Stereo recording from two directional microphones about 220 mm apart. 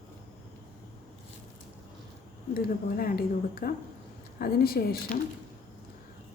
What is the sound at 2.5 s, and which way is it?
A woman's voice, 40° left (ahead or behind).